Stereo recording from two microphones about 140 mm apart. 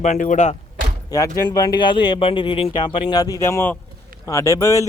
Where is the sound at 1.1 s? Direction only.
25° left (ahead or behind).